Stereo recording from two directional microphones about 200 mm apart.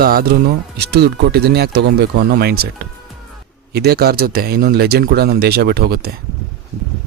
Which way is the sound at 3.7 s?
50° right (ahead or behind).